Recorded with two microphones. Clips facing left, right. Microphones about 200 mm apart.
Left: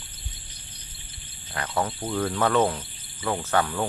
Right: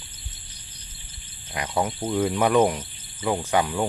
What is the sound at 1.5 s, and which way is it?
Speech, 15° right (ahead or behind).